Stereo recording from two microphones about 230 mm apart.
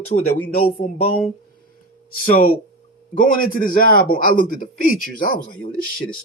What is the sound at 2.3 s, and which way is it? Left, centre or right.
A man's voice, left.